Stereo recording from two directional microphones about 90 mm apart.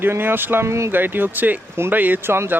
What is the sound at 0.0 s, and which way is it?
Speech, 25° right (ahead or behind).